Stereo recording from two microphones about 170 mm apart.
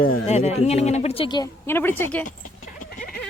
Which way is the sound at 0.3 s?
40° left (ahead or behind).